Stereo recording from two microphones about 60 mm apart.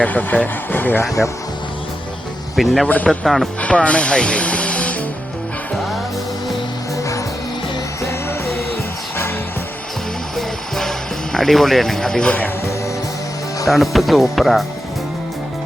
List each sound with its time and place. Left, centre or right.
0.0 s speech: left
2.6 s speech: centre
3.6 s speech: left
6.9 s music: left
8.0 s music: left
10.3 s music: centre
13.7 s speech: centre